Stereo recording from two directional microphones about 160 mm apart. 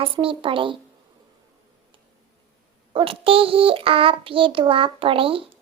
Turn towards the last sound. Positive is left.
turn(degrees=-35)  # may be behind; listen again after turning